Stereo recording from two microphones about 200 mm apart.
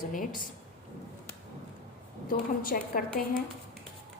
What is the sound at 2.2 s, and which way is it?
Speech, 45° left (ahead or behind).